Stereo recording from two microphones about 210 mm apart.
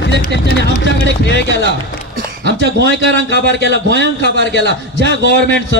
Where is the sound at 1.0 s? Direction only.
55° left (ahead or behind).